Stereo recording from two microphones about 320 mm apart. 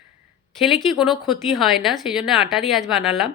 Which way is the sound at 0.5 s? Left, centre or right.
Centre.